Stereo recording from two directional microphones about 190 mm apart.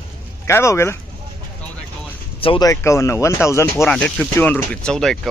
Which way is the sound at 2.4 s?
25° left (ahead or behind).